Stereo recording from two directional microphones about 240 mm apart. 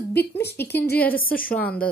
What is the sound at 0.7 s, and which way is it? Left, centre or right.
Speech, left.